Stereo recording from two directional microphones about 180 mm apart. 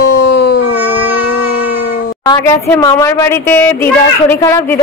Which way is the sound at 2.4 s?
15° left (ahead or behind).